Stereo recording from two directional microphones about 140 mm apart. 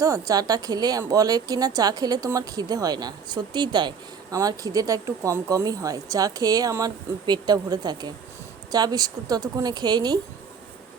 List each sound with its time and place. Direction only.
0.0 s speech: 25° right (ahead or behind)